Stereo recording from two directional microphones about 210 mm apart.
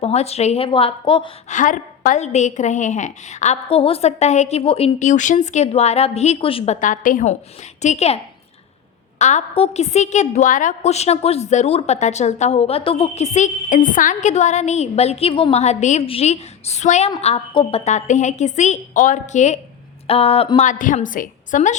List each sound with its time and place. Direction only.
0.0 s a woman's voice: 30° left (ahead or behind)